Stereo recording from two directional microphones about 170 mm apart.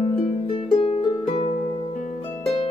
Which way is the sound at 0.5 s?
35° left (ahead or behind).